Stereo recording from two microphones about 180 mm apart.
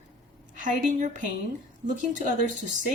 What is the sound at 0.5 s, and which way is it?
Speech, 45° right (ahead or behind).